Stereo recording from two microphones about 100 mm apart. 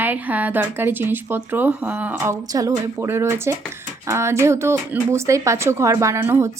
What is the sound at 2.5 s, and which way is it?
Speech, 35° right (ahead or behind).